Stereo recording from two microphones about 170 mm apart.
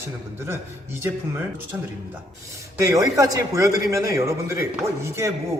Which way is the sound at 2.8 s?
20° right (ahead or behind).